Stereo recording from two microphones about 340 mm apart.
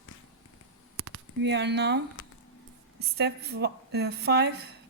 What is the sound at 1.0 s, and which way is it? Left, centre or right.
A woman's voice, right.